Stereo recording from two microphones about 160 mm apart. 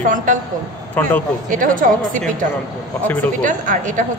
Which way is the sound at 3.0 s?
10° left (ahead or behind).